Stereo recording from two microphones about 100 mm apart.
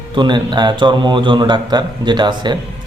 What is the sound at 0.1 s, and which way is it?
Speech, 50° right (ahead or behind).